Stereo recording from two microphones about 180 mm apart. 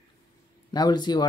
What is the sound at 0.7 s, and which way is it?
Speech, 25° left (ahead or behind).